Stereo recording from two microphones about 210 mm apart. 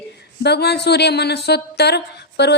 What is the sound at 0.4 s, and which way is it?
Speech, 50° left (ahead or behind).